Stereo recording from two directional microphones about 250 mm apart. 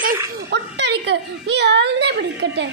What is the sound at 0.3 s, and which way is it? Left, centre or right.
A woman's voice, right.